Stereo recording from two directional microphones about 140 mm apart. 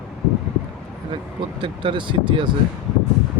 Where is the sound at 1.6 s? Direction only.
35° right (ahead or behind).